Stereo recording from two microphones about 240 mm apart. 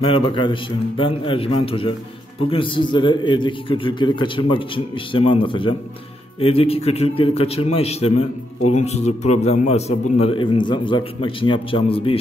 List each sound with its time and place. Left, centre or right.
0.0 s a man's voice: left